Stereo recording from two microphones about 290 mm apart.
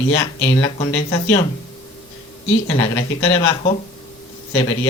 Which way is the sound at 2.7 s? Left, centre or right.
Centre.